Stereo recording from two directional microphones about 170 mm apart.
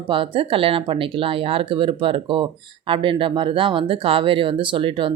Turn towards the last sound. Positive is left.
turn(degrees=-30)  # may be behind; listen again after turning